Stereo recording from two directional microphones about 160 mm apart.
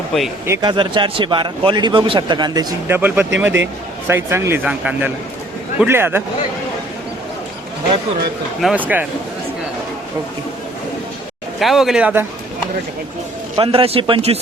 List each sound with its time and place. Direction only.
0.4 s speech: 15° right (ahead or behind)
0.7 s a man's voice: 30° right (ahead or behind)
2.8 s speech: 15° right (ahead or behind)
8.6 s speech: 10° right (ahead or behind)
11.6 s speech: centre (ahead or behind)
13.6 s speech: 35° right (ahead or behind)